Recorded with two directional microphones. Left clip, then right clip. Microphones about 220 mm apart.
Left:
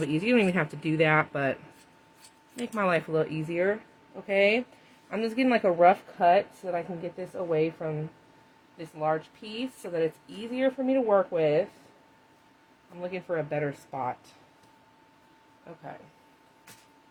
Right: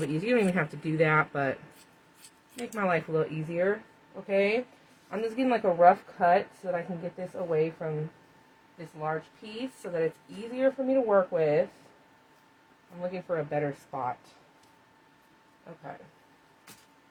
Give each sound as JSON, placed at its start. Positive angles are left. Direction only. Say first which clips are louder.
{"t": 0.0, "sound": "speech", "louder": "left 2 dB", "side_deg": 40}
{"t": 2.7, "sound": "a woman's voice", "louder": "left 2 dB", "side_deg": 40}
{"t": 13.0, "sound": "a woman's voice", "louder": "even", "side_deg": 40}